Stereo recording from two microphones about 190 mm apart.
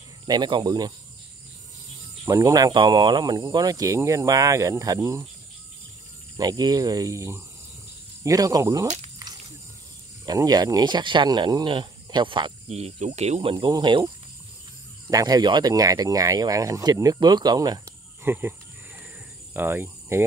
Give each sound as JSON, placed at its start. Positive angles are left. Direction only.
{"t": 0.3, "sound": "speech", "side_deg": -25}
{"t": 2.2, "sound": "speech", "side_deg": -20}
{"t": 6.3, "sound": "speech", "side_deg": -20}
{"t": 10.2, "sound": "speech", "side_deg": -20}
{"t": 19.5, "sound": "speech", "side_deg": -10}